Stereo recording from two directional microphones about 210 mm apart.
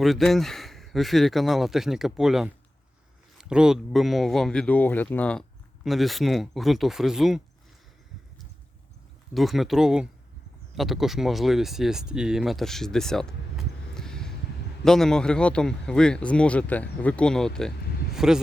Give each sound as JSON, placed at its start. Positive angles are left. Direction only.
{"t": 0.0, "sound": "speech", "side_deg": 0}
{"t": 9.3, "sound": "speech", "side_deg": 0}